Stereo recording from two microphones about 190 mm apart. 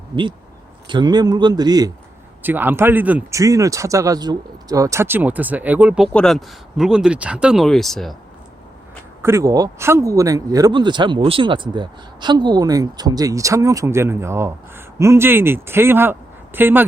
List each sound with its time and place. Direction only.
0.9 s speech: 25° right (ahead or behind)
2.4 s speech: 10° right (ahead or behind)
9.2 s speech: 15° right (ahead or behind)